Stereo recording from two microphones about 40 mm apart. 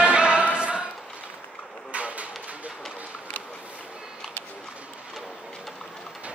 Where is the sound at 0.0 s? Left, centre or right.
Right.